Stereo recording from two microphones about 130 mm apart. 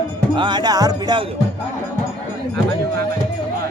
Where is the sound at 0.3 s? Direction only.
35° right (ahead or behind).